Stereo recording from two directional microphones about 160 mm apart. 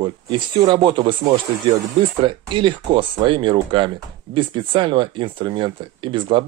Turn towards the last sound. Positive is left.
turn(degrees=-30)  # may be behind; listen again after turning